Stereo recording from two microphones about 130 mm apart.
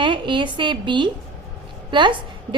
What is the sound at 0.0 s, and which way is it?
A woman's voice, 40° right (ahead or behind).